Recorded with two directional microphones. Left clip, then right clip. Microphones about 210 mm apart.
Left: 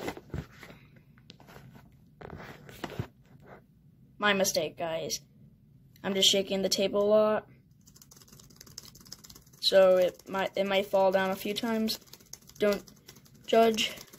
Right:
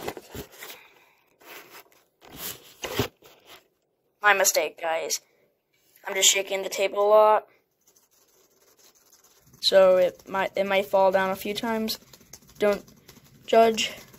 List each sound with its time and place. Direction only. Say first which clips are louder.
4.2 s speech: right 6 dB; 25° left (ahead or behind)
9.6 s speech: right 4 dB; 30° left (ahead or behind)